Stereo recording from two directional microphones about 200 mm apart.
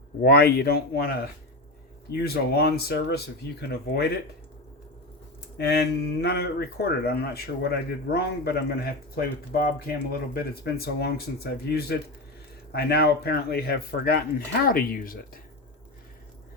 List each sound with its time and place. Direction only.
0.2 s speech: 50° left (ahead or behind)
5.5 s speech: 55° left (ahead or behind)